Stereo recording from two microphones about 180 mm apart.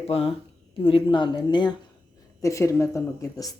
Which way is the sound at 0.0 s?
35° left (ahead or behind).